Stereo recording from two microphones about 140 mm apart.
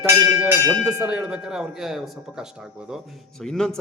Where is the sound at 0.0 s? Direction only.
20° right (ahead or behind).